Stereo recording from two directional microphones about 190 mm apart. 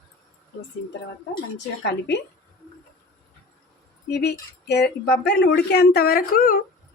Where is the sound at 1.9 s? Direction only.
65° left (ahead or behind).